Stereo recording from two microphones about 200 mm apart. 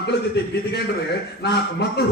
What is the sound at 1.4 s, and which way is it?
Speech, 55° left (ahead or behind).